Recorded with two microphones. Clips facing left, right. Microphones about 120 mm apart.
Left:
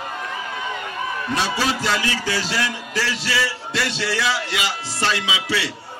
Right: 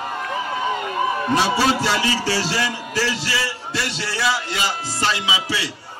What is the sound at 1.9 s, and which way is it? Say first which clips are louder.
Music: right 3 dB; 30° right (ahead or behind).